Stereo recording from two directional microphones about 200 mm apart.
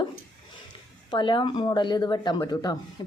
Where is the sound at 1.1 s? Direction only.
25° left (ahead or behind).